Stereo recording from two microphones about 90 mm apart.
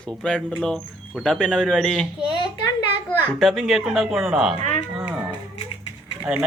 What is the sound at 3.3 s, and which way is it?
Speech, centre (ahead or behind).